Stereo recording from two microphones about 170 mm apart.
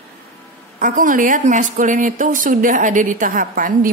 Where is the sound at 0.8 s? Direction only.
50° right (ahead or behind).